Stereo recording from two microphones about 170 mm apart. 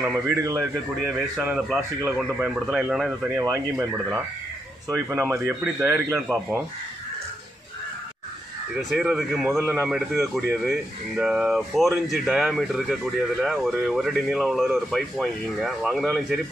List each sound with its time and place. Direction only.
0.3 s speech: 20° right (ahead or behind)
2.1 s speech: centre (ahead or behind)
3.3 s speech: 15° right (ahead or behind)
8.7 s speech: centre (ahead or behind)